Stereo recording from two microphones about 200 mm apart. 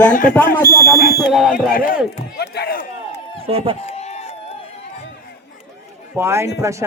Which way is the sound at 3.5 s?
30° right (ahead or behind).